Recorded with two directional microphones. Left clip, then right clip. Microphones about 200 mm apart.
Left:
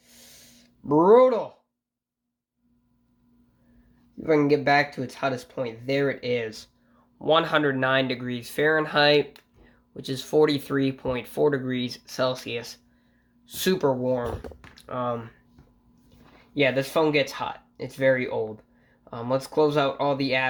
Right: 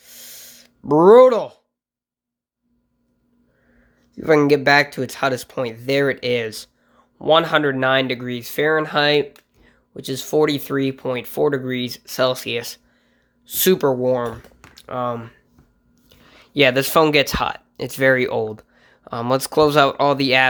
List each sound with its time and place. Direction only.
0.0 s a sound: 40° right (ahead or behind)
4.1 s speech: 40° right (ahead or behind)
16.6 s speech: 45° right (ahead or behind)